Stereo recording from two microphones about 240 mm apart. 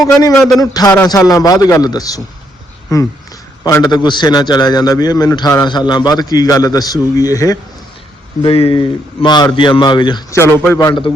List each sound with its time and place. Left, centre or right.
0.2 s a man's voice: centre